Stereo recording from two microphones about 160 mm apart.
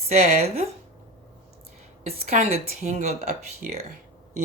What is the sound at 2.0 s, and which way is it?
Speech, 45° right (ahead or behind).